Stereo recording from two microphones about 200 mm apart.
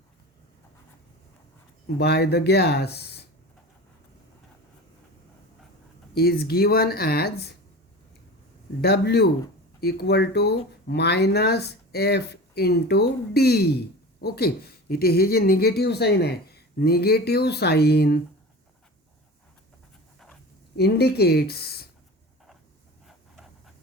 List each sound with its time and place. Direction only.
2.0 s speech: 55° left (ahead or behind)
6.1 s speech: 50° left (ahead or behind)
8.8 s speech: 55° left (ahead or behind)
20.1 s dog: centre (ahead or behind)
20.7 s speech: 55° left (ahead or behind)
23.0 s a sound: centre (ahead or behind)